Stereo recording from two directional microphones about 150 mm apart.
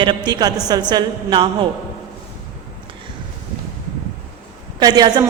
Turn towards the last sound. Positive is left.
turn(degrees=-25)  # may be behind; listen again after turning